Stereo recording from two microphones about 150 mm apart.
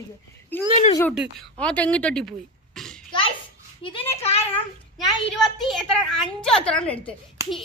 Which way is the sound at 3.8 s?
40° left (ahead or behind).